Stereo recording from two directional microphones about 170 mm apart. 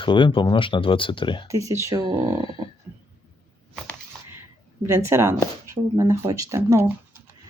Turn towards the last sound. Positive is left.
turn(degrees=-15)  # may be behind; listen again after turning